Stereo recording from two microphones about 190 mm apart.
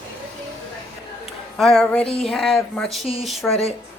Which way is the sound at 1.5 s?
Centre (ahead or behind).